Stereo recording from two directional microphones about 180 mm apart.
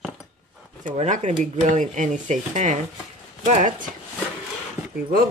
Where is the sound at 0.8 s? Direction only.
40° right (ahead or behind).